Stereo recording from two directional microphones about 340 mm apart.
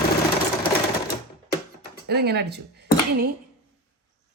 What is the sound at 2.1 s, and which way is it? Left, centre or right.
Speech, right.